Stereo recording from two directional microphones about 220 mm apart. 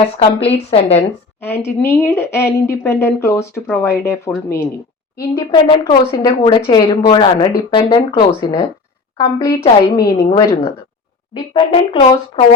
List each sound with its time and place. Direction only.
0.2 s speech: 25° left (ahead or behind)
1.4 s speech: 10° left (ahead or behind)
9.1 s speech: 15° left (ahead or behind)